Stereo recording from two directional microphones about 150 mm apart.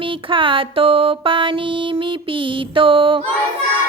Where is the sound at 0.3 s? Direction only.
35° right (ahead or behind).